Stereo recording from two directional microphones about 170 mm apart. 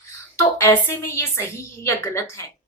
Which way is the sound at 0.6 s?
15° left (ahead or behind).